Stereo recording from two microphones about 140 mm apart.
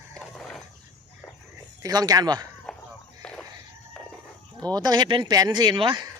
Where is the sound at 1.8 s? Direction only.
25° right (ahead or behind).